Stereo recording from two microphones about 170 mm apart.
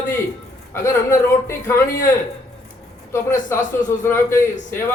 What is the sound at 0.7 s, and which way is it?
A man's voice, 15° left (ahead or behind).